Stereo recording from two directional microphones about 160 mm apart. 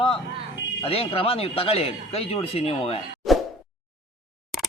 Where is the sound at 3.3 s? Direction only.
Centre (ahead or behind).